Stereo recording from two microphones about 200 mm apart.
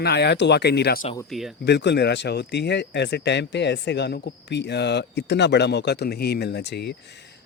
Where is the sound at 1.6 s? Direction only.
60° left (ahead or behind).